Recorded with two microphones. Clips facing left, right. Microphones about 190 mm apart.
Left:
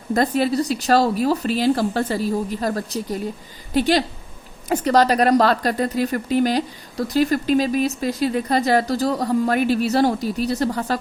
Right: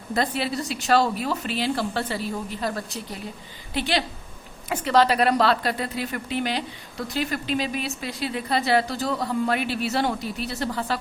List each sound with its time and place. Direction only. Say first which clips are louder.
0.1 s speech: left 7 dB; 45° left (ahead or behind)